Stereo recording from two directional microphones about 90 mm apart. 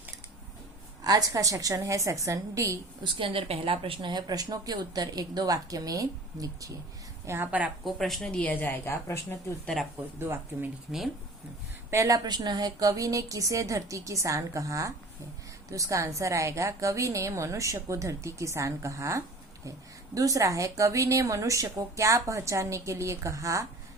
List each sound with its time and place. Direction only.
1.0 s a woman's voice: 45° right (ahead or behind)
3.0 s a woman's voice: 85° right
4.1 s speech: 50° right (ahead or behind)
7.3 s speech: 30° right (ahead or behind)
7.9 s speech: centre (ahead or behind)
8.6 s a woman's voice: 25° left (ahead or behind)
10.0 s speech: 25° right (ahead or behind)
11.9 s a woman's voice: 35° right (ahead or behind)